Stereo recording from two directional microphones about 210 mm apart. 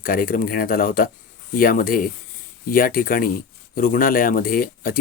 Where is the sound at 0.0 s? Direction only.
40° left (ahead or behind).